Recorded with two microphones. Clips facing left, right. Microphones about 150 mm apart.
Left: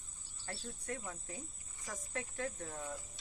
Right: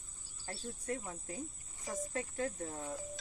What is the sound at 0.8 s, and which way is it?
Speech, 35° right (ahead or behind).